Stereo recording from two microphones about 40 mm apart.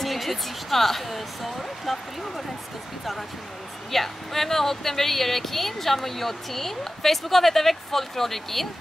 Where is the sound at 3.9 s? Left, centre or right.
Centre.